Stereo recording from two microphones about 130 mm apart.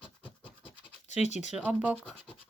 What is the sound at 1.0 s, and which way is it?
Speech, 60° left (ahead or behind).